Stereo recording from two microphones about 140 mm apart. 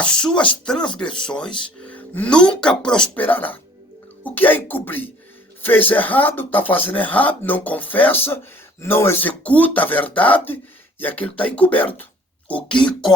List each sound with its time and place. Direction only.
0.0 s speech: 5° left (ahead or behind)